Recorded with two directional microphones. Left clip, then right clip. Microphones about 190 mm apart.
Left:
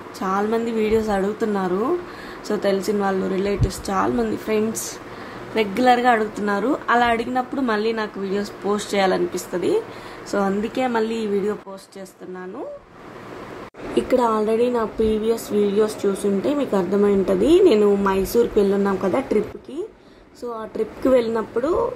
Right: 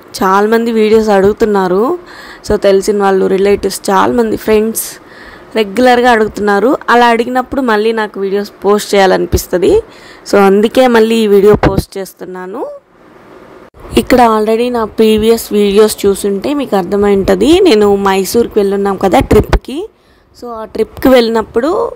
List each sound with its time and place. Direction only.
0.1 s a woman's voice: 50° right (ahead or behind)
14.0 s a woman's voice: 50° right (ahead or behind)